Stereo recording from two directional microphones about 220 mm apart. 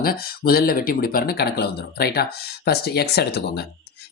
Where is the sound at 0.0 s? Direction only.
40° left (ahead or behind).